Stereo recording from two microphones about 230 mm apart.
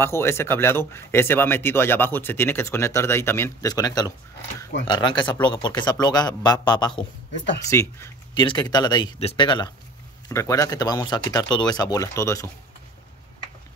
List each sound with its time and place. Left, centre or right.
0.0 s speech: centre